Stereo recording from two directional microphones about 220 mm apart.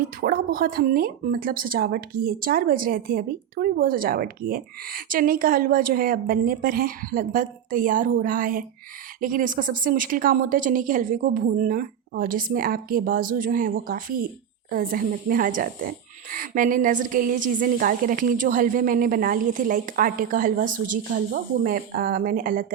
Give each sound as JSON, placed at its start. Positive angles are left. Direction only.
{"t": 0.0, "sound": "speech", "side_deg": -40}